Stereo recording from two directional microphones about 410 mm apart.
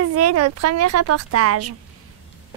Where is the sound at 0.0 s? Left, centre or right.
Right.